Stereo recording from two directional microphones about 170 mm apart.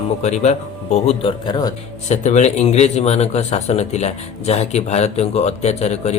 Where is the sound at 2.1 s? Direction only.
45° left (ahead or behind).